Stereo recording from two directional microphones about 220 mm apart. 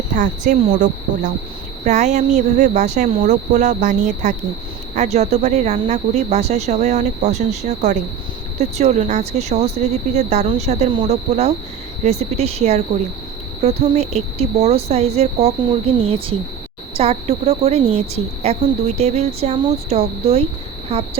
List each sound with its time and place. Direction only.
0.1 s speech: 35° right (ahead or behind)